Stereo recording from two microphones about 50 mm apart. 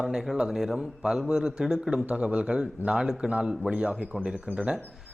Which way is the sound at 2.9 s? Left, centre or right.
Centre.